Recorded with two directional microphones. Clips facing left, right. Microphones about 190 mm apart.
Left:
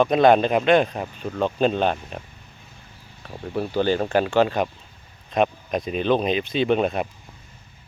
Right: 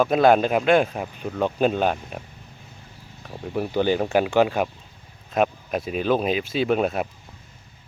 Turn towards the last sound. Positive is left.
turn(degrees=-5)  # may be behind; listen again after turning